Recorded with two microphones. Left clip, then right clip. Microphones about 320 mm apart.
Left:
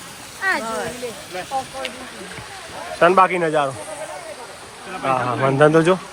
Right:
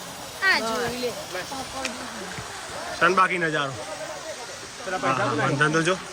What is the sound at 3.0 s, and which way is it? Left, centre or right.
Speech, centre.